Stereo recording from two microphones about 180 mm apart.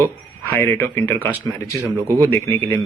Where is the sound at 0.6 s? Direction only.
10° left (ahead or behind).